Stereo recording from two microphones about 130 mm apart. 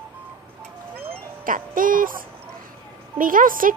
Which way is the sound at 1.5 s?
90° right.